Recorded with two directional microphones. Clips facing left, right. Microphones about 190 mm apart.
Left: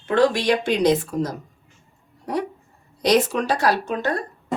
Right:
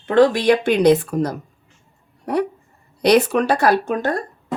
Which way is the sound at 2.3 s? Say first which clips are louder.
Right 5 dB; 60° right (ahead or behind).